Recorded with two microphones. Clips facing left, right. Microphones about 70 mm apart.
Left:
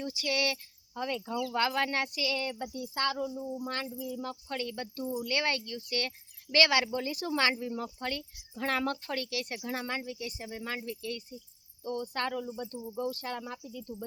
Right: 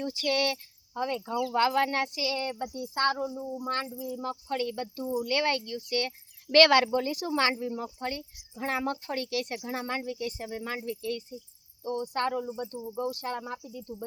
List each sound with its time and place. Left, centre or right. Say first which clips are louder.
0.0 s speech: right 4 dB; right
3.4 s speech: right 1 dB; centre
3.8 s speech: right 3 dB; right
6.5 s speech: right 6 dB; right